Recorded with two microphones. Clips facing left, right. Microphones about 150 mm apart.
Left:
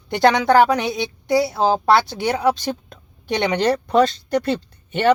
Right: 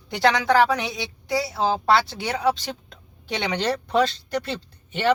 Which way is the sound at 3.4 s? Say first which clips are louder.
Left 6 dB; 55° left (ahead or behind).